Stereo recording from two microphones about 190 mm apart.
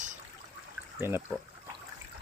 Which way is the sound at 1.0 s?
10° right (ahead or behind).